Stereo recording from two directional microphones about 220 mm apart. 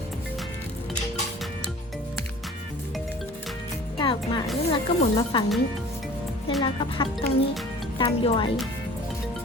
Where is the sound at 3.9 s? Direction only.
20° left (ahead or behind).